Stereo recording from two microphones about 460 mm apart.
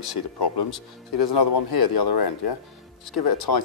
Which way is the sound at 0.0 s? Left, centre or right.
Left.